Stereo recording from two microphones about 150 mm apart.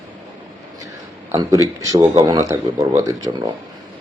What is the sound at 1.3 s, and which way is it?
Speech, 25° right (ahead or behind).